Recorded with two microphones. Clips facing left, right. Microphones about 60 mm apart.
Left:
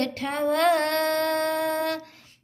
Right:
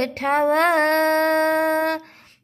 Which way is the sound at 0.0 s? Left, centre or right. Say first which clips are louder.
Right 6 dB; right.